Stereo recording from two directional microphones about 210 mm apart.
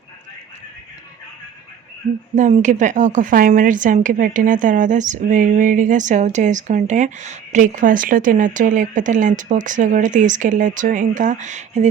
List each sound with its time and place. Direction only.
2.3 s a woman's voice: 35° right (ahead or behind)